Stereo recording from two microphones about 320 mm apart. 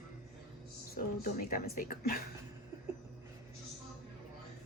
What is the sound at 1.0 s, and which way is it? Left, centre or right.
Speech, left.